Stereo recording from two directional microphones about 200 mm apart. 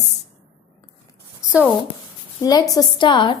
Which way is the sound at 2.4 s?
20° left (ahead or behind).